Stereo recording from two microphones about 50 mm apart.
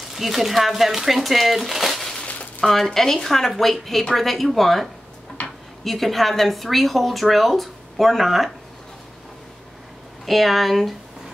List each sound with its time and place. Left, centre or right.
0.1 s speech: centre
5.4 s a sound: left
5.9 s speech: centre
10.2 s speech: centre